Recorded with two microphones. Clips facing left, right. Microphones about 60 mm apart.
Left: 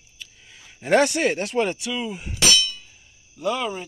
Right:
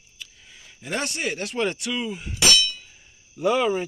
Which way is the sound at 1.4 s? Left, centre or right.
Left.